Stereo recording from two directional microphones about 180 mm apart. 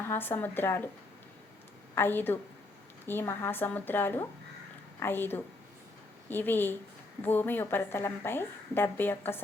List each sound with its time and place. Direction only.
0.1 s a woman's voice: 10° left (ahead or behind)
2.0 s a woman's voice: 10° left (ahead or behind)